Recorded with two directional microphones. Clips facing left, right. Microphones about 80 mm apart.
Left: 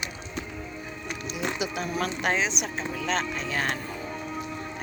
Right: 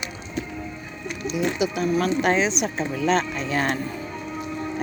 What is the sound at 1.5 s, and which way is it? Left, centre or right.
Speech, left.